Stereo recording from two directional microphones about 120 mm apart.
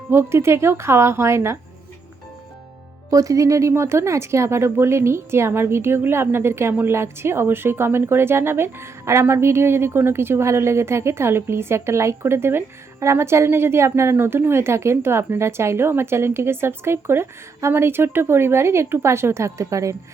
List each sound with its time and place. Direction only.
0.1 s speech: 20° right (ahead or behind)
3.1 s speech: 30° right (ahead or behind)